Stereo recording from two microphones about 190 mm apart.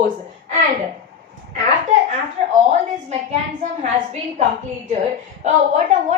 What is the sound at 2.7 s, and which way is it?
Speech, 35° right (ahead or behind).